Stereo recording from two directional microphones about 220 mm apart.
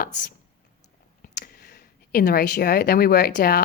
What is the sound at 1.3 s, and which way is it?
Speech, 45° left (ahead or behind).